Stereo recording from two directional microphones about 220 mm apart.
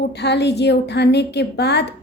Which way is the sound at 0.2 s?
50° left (ahead or behind).